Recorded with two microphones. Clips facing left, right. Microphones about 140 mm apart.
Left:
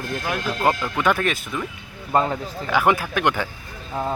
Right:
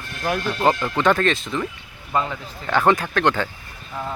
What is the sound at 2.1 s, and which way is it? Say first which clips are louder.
Speech: left 3 dB; 40° left (ahead or behind).